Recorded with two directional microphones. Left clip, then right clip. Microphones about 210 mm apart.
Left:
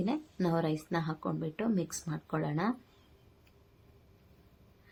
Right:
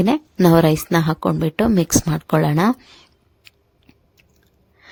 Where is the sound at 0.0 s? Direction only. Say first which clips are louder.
Right 17 dB; 50° right (ahead or behind).